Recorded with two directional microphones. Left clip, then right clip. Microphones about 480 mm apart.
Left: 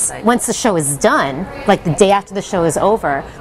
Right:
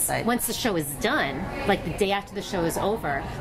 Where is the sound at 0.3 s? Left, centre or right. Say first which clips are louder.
Left 16 dB; left.